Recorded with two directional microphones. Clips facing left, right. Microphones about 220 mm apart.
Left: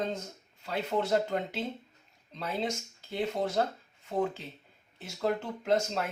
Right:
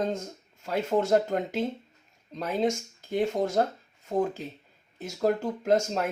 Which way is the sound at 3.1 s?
45° right (ahead or behind).